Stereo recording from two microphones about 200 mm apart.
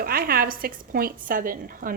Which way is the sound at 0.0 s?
45° right (ahead or behind).